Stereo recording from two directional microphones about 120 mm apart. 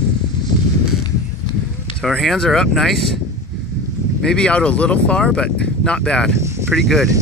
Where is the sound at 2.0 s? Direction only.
5° left (ahead or behind).